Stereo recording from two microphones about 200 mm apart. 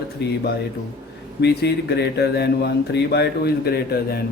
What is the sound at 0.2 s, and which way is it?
Speech, 55° left (ahead or behind).